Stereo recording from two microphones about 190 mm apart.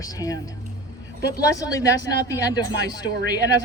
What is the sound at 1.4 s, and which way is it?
Speech, 20° left (ahead or behind).